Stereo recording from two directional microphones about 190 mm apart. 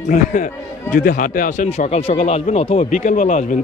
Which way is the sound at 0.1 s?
45° left (ahead or behind).